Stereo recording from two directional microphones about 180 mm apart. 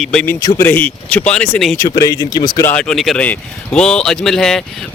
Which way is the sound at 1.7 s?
15° left (ahead or behind).